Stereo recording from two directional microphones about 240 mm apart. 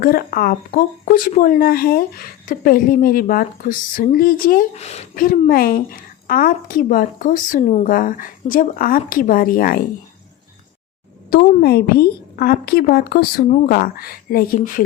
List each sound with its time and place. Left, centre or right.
0.0 s speech: left
11.3 s speech: left